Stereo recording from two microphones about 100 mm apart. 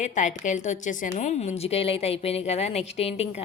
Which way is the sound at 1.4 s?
90° left.